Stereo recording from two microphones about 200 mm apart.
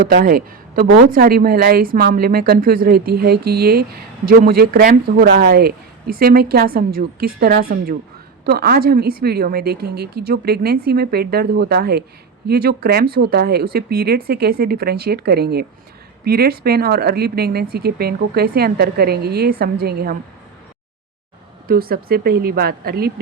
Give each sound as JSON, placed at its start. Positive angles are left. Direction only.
{"t": 0.0, "sound": "speech", "side_deg": -50}
{"t": 21.7, "sound": "speech", "side_deg": -50}